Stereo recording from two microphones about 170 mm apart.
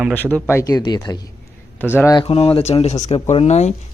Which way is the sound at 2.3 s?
35° left (ahead or behind).